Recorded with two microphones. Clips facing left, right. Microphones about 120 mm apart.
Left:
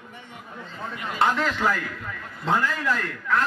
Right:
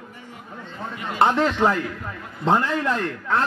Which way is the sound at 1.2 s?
30° right (ahead or behind).